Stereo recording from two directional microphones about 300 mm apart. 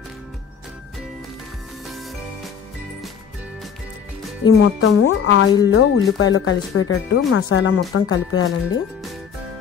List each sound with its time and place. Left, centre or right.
4.5 s speech: left